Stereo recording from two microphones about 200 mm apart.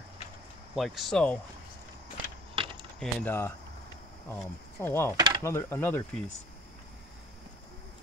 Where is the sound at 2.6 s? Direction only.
25° right (ahead or behind).